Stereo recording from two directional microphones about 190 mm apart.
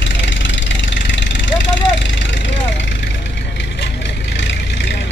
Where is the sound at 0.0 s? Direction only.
70° left (ahead or behind).